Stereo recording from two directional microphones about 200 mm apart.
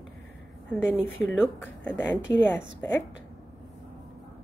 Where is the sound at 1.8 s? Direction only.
10° left (ahead or behind).